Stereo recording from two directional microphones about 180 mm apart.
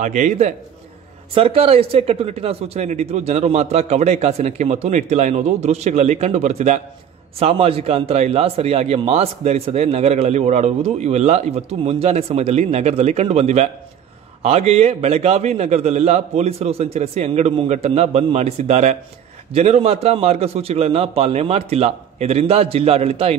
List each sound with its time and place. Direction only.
0.0 s a man's voice: 40° right (ahead or behind)